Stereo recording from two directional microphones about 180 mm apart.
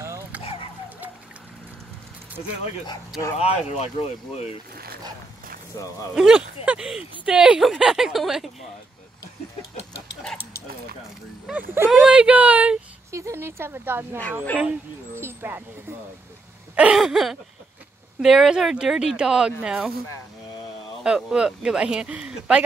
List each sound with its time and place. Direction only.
0.0 s a sound: 15° right (ahead or behind)
0.4 s a sound: 30° left (ahead or behind)
2.5 s speech: 35° left (ahead or behind)
5.7 s speech: 15° left (ahead or behind)
6.1 s speech: 5° right (ahead or behind)
11.4 s speech: 10° right (ahead or behind)
16.7 s a sound: 5° right (ahead or behind)
18.2 s speech: centre (ahead or behind)
21.0 s speech: 5° right (ahead or behind)